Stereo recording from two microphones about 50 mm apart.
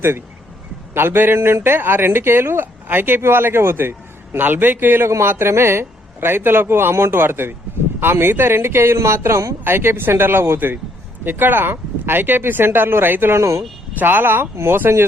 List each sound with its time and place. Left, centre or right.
0.9 s a man's voice: right
2.9 s speech: right
3.2 s a man's voice: right
5.2 s a man's voice: right
9.6 s a man's voice: right
13.3 s speech: right
14.0 s speech: right
14.5 s a man's voice: right